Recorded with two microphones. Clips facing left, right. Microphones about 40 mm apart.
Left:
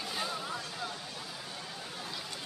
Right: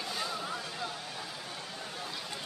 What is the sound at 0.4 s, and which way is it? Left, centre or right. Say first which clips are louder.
Music: right 1 dB; centre.